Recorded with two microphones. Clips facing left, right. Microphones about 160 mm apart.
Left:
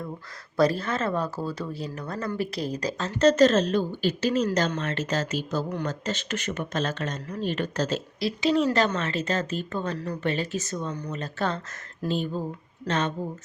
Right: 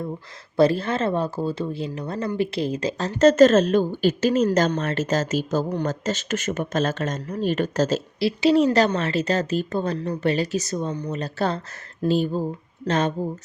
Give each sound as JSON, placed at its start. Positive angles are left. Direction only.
{"t": 0.5, "sound": "speech", "side_deg": -30}
{"t": 3.0, "sound": "speech", "side_deg": -45}
{"t": 12.8, "sound": "speech", "side_deg": -40}